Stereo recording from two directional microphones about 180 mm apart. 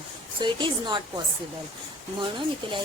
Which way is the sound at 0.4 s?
25° right (ahead or behind).